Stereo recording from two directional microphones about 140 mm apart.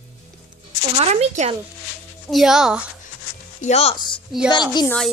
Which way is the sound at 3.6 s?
50° left (ahead or behind).